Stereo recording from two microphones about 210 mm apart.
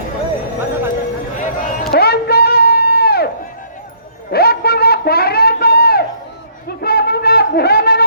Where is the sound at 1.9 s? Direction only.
50° left (ahead or behind).